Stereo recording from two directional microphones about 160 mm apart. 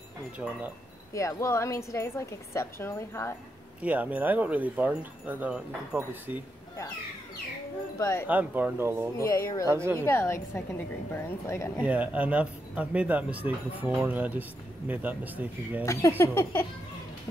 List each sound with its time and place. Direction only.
1.1 s a woman's voice: 20° left (ahead or behind)
3.8 s speech: 10° right (ahead or behind)
8.0 s a woman's voice: 15° left (ahead or behind)
8.3 s speech: 10° right (ahead or behind)
9.2 s speech: 20° left (ahead or behind)
9.7 s speech: 15° right (ahead or behind)
9.9 s a woman's voice: 15° left (ahead or behind)
11.8 s speech: 10° right (ahead or behind)
15.8 s a woman's voice: 20° left (ahead or behind)